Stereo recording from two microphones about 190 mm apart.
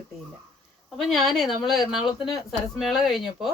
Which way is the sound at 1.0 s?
Centre (ahead or behind).